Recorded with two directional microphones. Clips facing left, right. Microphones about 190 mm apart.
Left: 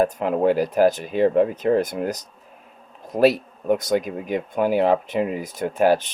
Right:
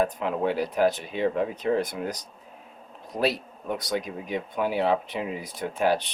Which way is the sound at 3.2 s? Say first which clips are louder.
Left 9 dB; 45° left (ahead or behind).